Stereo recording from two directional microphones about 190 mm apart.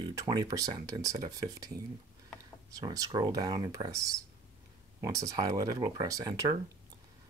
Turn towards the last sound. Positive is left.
turn(degrees=-20)  # may be behind; listen again after turning